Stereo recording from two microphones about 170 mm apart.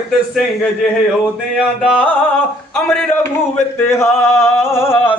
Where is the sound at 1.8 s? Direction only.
Centre (ahead or behind).